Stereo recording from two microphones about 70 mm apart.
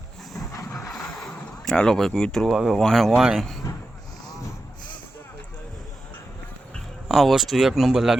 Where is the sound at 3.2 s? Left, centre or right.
Centre.